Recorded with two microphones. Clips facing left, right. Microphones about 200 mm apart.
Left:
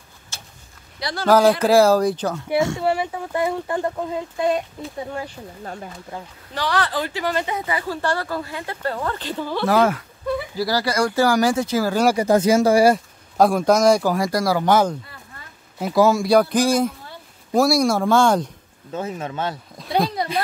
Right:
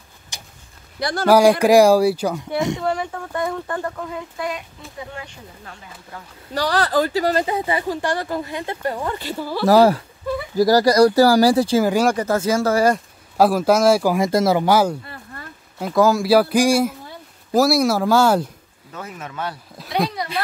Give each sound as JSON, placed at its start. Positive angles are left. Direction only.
{"t": 0.3, "sound": "a sound", "side_deg": -15}
{"t": 0.9, "sound": "speech", "side_deg": -50}
{"t": 1.2, "sound": "speech", "side_deg": -10}
{"t": 2.8, "sound": "speech", "side_deg": 10}
{"t": 5.1, "sound": "speech", "side_deg": 40}
{"t": 6.5, "sound": "speech", "side_deg": -40}
{"t": 7.8, "sound": "speech", "side_deg": -15}
{"t": 9.7, "sound": "speech", "side_deg": -35}
{"t": 12.2, "sound": "speech", "side_deg": 15}
{"t": 13.4, "sound": "speech", "side_deg": -5}
{"t": 14.2, "sound": "speech", "side_deg": -20}
{"t": 14.6, "sound": "speech", "side_deg": -10}
{"t": 18.9, "sound": "speech", "side_deg": 30}